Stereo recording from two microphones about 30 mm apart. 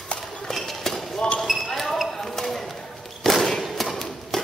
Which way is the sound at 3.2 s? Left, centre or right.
Centre.